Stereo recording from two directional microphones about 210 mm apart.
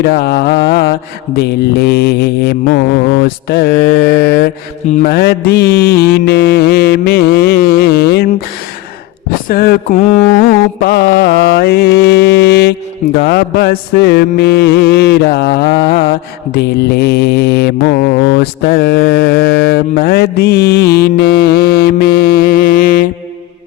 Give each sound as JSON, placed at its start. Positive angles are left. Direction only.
{"t": 0.0, "sound": "mantra", "side_deg": 50}
{"t": 9.5, "sound": "mantra", "side_deg": 45}